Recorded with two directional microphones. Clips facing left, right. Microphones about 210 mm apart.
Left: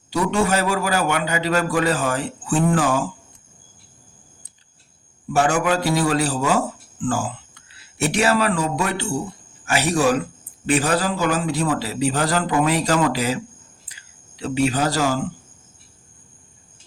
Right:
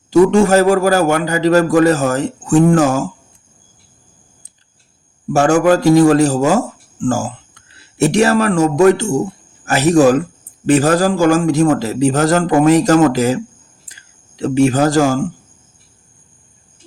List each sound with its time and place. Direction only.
0.1 s a man's voice: 45° right (ahead or behind)
5.3 s a man's voice: 45° right (ahead or behind)
13.8 s a sound: 45° right (ahead or behind)